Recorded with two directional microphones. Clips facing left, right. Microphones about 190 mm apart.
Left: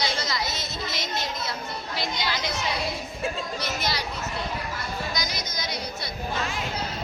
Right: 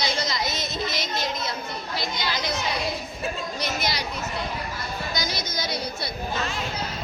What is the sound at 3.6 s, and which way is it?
Speech, 15° right (ahead or behind).